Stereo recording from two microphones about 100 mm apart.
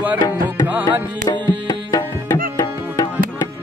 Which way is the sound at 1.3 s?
45° left (ahead or behind).